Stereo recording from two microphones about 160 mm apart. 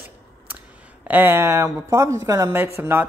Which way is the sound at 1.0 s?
15° right (ahead or behind).